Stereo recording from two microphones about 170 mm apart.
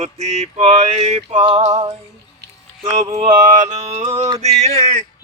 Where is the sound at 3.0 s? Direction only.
45° right (ahead or behind).